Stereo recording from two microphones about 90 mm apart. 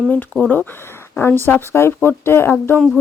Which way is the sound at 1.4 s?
25° left (ahead or behind).